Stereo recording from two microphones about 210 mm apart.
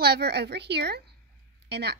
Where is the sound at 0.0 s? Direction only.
50° right (ahead or behind).